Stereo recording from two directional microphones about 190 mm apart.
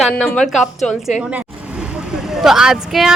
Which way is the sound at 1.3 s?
5° right (ahead or behind).